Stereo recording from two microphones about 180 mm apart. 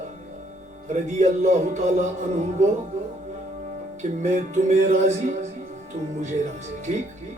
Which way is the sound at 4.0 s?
40° right (ahead or behind).